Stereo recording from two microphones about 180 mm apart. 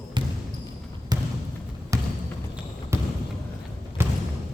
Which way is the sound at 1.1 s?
20° right (ahead or behind).